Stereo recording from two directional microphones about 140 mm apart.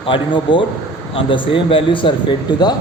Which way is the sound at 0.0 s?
40° left (ahead or behind).